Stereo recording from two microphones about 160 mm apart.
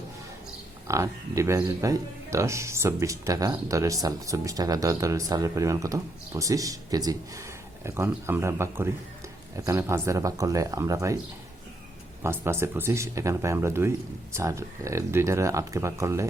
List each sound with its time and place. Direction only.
0.9 s speech: 20° right (ahead or behind)
12.2 s speech: 15° right (ahead or behind)